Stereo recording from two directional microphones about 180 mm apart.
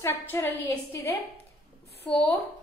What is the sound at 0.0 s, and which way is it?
A woman's voice, 10° left (ahead or behind).